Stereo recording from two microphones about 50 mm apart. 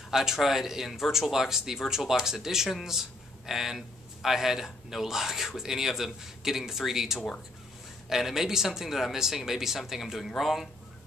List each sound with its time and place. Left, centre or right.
0.1 s speech: centre